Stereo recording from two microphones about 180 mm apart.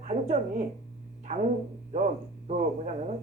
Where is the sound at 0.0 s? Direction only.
40° right (ahead or behind).